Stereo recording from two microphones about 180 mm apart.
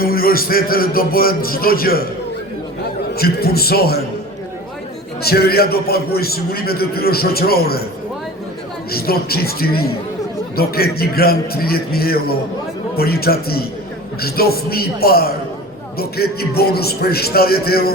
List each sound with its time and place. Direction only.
0.0 s a man's voice: 55° left (ahead or behind)
3.2 s a man's voice: 60° left (ahead or behind)
5.2 s a man's voice: 60° left (ahead or behind)
8.9 s a man's voice: 55° left (ahead or behind)